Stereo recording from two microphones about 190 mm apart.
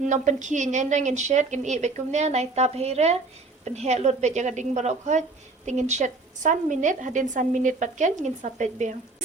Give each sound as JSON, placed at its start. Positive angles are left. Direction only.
{"t": 0.0, "sound": "speech", "side_deg": -40}